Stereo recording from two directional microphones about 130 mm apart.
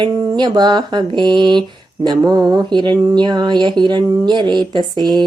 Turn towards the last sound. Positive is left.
turn(degrees=-35)  # may be behind; listen again after turning